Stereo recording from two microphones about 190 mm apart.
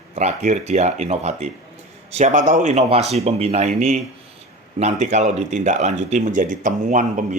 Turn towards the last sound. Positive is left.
turn(degrees=-40)  # may be behind; listen again after turning